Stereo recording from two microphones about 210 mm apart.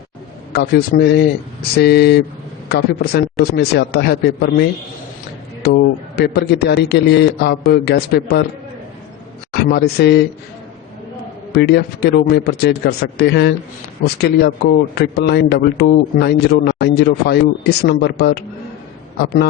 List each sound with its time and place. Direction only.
0.5 s a man's voice: 50° left (ahead or behind)
9.6 s a man's voice: 50° left (ahead or behind)
11.5 s a man's voice: 55° left (ahead or behind)